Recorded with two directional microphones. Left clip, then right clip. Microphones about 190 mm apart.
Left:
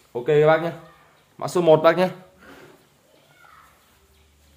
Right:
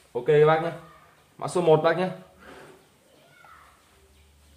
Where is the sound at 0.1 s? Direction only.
40° left (ahead or behind).